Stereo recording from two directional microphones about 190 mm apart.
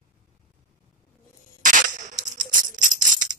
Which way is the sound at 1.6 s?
40° right (ahead or behind).